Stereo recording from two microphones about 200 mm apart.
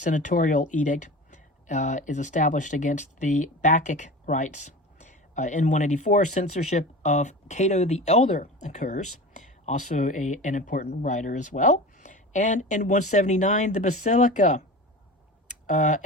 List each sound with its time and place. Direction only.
0.0 s speech: 40° left (ahead or behind)
15.6 s speech: 40° left (ahead or behind)